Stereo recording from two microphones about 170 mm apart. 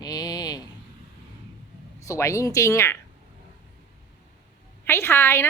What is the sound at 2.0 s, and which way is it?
Speech, 15° left (ahead or behind).